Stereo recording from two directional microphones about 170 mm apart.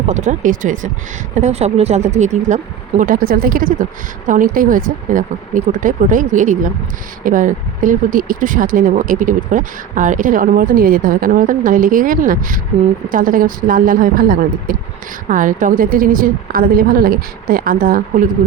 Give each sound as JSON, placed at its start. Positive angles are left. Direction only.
{"t": 0.0, "sound": "speech", "side_deg": -45}
{"t": 3.0, "sound": "a woman's voice", "side_deg": -55}